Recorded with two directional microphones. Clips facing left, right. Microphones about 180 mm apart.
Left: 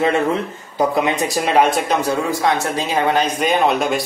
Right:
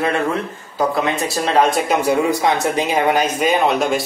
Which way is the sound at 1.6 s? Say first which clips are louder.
Right 1 dB; 5° right (ahead or behind).